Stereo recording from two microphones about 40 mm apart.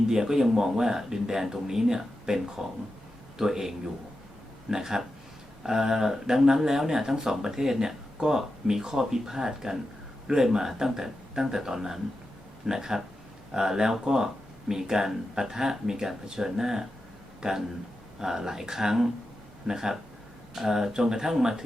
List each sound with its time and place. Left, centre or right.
0.1 s speech: centre